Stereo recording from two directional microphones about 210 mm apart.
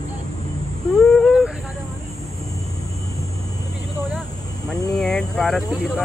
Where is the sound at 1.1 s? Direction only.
Centre (ahead or behind).